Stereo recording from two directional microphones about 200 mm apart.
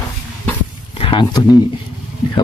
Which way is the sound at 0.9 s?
25° left (ahead or behind).